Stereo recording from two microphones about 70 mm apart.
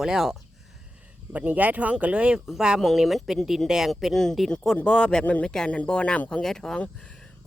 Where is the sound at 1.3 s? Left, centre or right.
Right; by 6.4 s centre.